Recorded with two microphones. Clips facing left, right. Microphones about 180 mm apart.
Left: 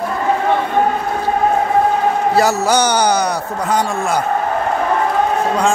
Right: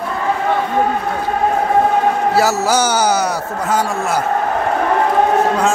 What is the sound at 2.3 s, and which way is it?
A man's voice, 5° right (ahead or behind).